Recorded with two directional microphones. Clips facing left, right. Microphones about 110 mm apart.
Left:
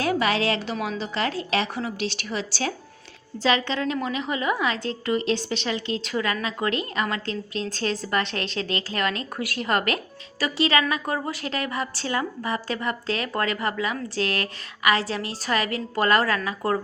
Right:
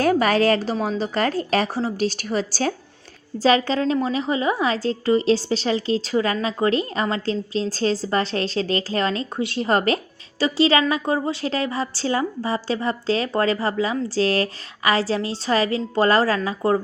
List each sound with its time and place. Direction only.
0.0 s a woman's voice: 45° right (ahead or behind); by 16.8 s 25° right (ahead or behind)